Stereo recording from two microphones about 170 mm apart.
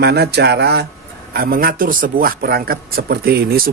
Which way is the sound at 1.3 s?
60° right (ahead or behind).